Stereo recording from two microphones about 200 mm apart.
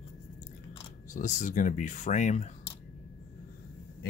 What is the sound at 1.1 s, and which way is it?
Speech, 40° left (ahead or behind).